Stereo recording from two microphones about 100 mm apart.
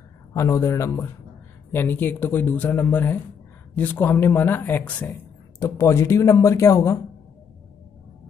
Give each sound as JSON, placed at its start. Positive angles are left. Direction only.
{"t": 0.3, "sound": "a man's voice", "side_deg": 30}
{"t": 5.6, "sound": "speech", "side_deg": 30}